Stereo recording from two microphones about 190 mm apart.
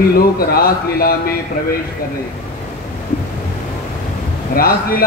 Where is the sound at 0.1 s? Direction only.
50° left (ahead or behind).